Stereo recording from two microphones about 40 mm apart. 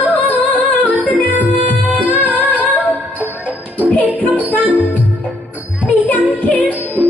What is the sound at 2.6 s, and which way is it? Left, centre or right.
Music, left.